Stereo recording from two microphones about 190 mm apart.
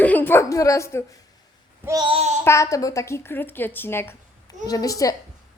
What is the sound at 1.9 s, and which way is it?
Child singing, 25° right (ahead or behind).